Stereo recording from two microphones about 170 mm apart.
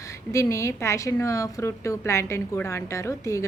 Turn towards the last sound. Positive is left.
turn(degrees=15)  # may be behind; listen again after turning